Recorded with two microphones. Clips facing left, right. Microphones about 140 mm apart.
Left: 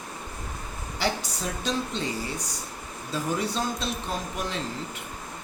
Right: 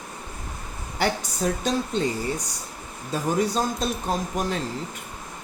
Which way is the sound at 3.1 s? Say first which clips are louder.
Right 5 dB; 45° right (ahead or behind).